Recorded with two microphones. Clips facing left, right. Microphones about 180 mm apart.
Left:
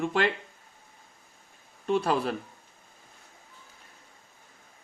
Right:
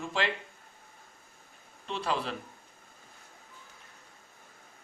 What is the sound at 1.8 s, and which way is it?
Speech, 50° left (ahead or behind).